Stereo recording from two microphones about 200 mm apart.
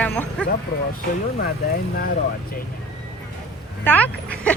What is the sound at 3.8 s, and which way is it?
Speech, 10° left (ahead or behind).